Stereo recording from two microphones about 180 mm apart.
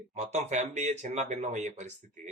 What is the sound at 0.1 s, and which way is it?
Speech, 40° right (ahead or behind).